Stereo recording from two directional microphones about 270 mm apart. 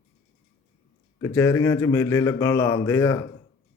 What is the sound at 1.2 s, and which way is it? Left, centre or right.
Speech, centre.